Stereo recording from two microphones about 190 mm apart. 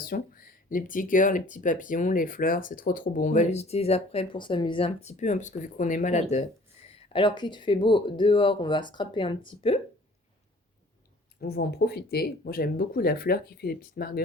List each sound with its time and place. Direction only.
0.0 s speech: 50° left (ahead or behind)
6.8 s speech: 25° left (ahead or behind)
11.3 s speech: 60° left (ahead or behind)